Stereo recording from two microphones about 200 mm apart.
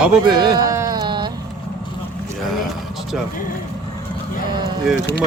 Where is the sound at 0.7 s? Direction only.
20° right (ahead or behind).